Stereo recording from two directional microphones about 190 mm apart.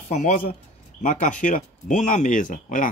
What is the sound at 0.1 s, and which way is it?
A man's voice, 40° left (ahead or behind).